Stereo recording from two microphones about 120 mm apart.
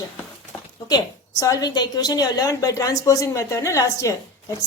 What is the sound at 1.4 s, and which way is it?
A woman's voice, 30° left (ahead or behind).